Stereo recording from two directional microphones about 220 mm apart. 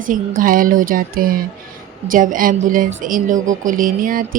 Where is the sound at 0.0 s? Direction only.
40° right (ahead or behind).